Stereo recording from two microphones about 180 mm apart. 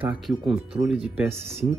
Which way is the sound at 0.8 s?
5° right (ahead or behind).